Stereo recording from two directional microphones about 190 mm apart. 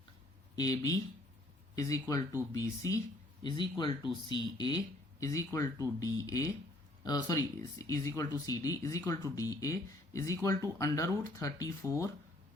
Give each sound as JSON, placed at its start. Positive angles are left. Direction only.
{"t": 0.5, "sound": "speech", "side_deg": 20}